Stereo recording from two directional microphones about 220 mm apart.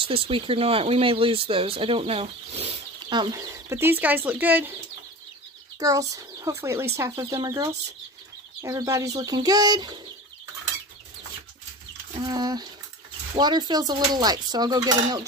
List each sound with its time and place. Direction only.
0.0 s speech: 25° right (ahead or behind); by 4.7 s 10° right (ahead or behind)
5.8 s speech: 15° right (ahead or behind)
12.2 s speech: 15° right (ahead or behind)